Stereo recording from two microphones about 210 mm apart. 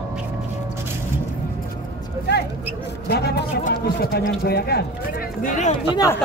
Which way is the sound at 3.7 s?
50° left (ahead or behind).